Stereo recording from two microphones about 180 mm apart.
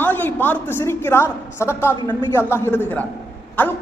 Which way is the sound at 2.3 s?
15° left (ahead or behind).